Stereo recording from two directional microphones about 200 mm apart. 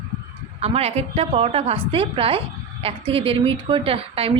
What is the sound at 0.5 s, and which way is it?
A woman's voice, 30° right (ahead or behind).